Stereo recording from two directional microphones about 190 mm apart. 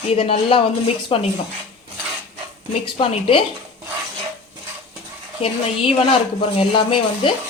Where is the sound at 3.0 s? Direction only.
30° left (ahead or behind).